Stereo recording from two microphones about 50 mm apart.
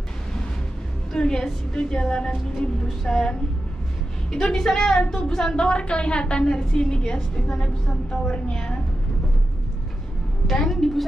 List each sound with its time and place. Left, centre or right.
1.1 s a woman's voice: centre
10.4 s a woman's voice: centre